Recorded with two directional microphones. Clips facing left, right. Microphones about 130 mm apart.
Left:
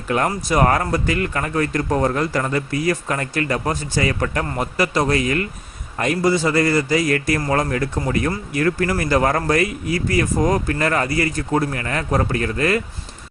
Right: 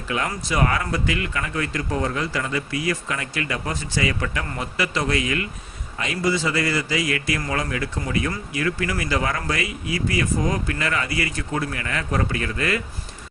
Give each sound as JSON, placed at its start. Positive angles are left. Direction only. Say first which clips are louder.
{"t": 0.1, "sound": "a man's voice", "louder": "left 6 dB", "side_deg": 45}